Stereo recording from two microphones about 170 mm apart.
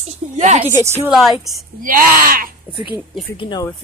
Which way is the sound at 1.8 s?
55° right (ahead or behind).